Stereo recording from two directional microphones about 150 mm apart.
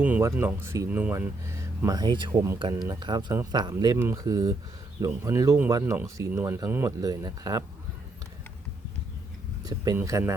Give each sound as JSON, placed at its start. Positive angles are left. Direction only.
{"t": 0.0, "sound": "speech", "side_deg": -15}
{"t": 9.6, "sound": "speech", "side_deg": -25}